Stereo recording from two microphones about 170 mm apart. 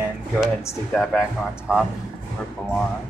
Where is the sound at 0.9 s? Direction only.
Centre (ahead or behind).